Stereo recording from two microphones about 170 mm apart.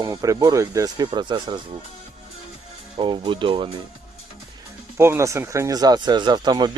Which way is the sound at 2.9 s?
30° right (ahead or behind).